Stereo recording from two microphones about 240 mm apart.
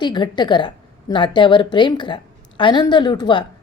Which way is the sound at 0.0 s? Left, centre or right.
Centre.